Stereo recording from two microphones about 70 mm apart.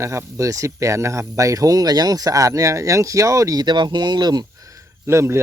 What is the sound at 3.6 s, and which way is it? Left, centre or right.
Speech, right.